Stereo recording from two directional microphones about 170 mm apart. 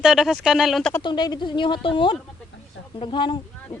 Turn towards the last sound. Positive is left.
turn(degrees=25)  # may be behind; listen again after turning